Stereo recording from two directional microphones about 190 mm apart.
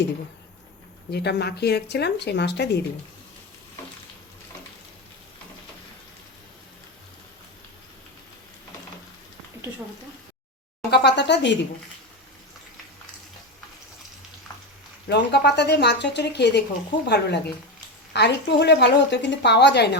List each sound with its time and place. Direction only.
1.1 s a woman's voice: 60° left (ahead or behind)
10.9 s speech: 65° left (ahead or behind)
15.1 s a woman's voice: 60° left (ahead or behind)